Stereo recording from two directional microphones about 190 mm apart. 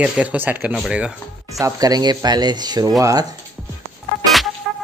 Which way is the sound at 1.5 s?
20° right (ahead or behind).